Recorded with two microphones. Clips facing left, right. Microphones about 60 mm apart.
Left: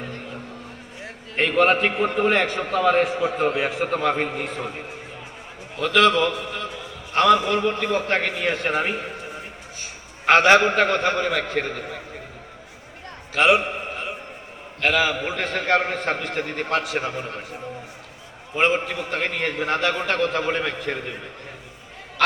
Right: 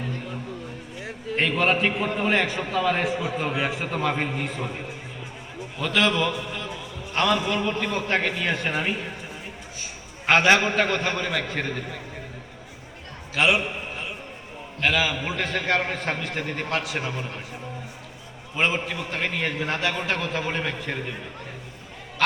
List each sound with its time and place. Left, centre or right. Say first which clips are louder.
1.5 s a man's voice: left 5 dB; left
2.8 s a man's voice: left 7 dB; left
3.1 s a man's voice: left 4 dB; left
5.8 s a man's voice: left 5 dB; left
10.2 s a man's voice: left 4 dB; left
13.3 s a sound: left 4 dB; left
14.8 s a man's voice: left 3 dB; left
18.5 s a man's voice: left 4 dB; left